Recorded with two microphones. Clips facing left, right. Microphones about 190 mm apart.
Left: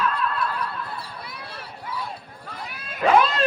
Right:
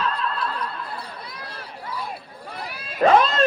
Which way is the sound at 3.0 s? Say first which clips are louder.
Right 3 dB; 40° right (ahead or behind).